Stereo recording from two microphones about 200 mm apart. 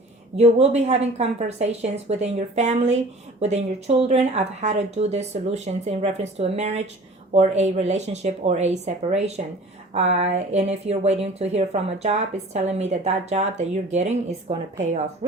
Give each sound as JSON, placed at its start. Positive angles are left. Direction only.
{"t": 0.3, "sound": "speech", "side_deg": -30}